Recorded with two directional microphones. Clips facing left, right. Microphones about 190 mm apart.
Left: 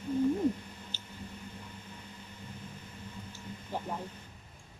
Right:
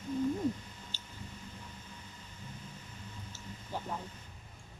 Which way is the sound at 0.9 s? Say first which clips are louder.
Left 2 dB; 20° left (ahead or behind).